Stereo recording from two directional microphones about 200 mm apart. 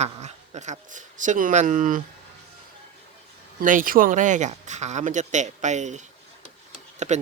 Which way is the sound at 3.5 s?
45° right (ahead or behind).